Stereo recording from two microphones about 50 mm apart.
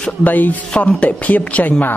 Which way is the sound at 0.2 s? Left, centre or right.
Left.